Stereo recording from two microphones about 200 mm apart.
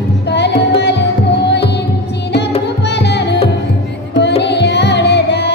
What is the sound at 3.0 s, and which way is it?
Music, 60° left (ahead or behind).